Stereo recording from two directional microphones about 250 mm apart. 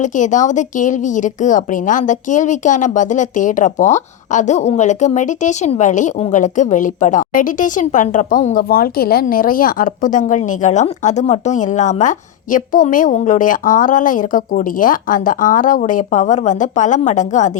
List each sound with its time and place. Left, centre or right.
0.0 s a woman's voice: left